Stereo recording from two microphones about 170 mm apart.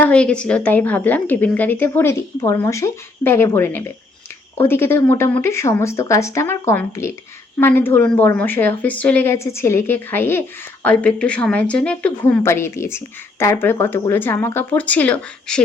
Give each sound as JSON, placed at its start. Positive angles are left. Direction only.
{"t": 0.0, "sound": "a woman's voice", "side_deg": 5}